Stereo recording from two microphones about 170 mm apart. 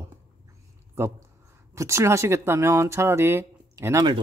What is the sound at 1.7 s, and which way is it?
Speech, 15° right (ahead or behind).